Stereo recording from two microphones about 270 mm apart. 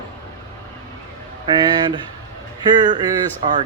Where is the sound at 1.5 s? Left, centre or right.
Centre.